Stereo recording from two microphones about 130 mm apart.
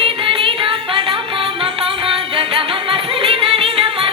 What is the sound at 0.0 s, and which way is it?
Music, 45° right (ahead or behind).